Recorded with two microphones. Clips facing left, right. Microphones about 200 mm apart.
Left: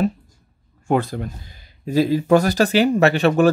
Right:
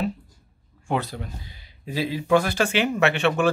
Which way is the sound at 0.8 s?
45° left (ahead or behind).